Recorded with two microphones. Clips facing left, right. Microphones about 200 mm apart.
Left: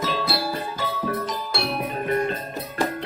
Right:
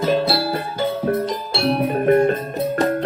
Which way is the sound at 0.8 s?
50° right (ahead or behind).